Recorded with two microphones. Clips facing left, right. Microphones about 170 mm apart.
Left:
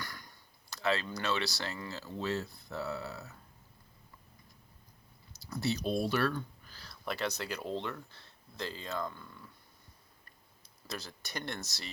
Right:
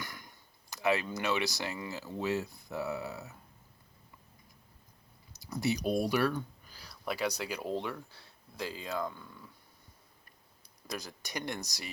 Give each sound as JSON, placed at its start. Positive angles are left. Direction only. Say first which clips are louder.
{"t": 0.0, "sound": "speech", "louder": "right 1 dB", "side_deg": -20}
{"t": 5.3, "sound": "speech", "louder": "right 2 dB", "side_deg": -15}
{"t": 10.8, "sound": "speech", "louder": "right 2 dB", "side_deg": -15}